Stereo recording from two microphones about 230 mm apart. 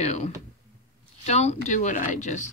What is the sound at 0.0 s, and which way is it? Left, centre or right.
Speech, left.